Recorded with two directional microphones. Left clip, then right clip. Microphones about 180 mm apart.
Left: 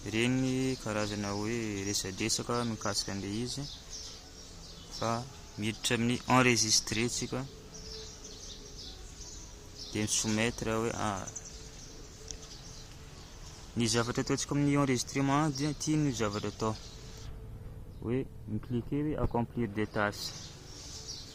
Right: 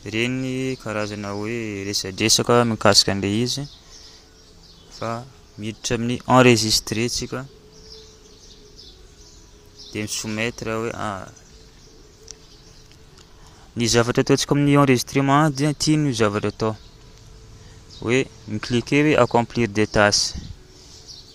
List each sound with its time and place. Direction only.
0.0 s speech: 20° right (ahead or behind)
2.1 s speech: 45° right (ahead or behind)
4.9 s speech: 15° right (ahead or behind); by 6.2 s 35° right (ahead or behind)
6.4 s speech: 45° right (ahead or behind)
7.2 s speech: 20° right (ahead or behind)
9.9 s speech: 15° right (ahead or behind)
13.7 s speech: 30° right (ahead or behind)
18.0 s speech: 45° right (ahead or behind)